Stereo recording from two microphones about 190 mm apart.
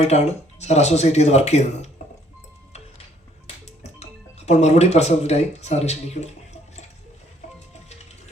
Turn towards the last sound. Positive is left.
turn(degrees=35)  # may be behind; listen again after turning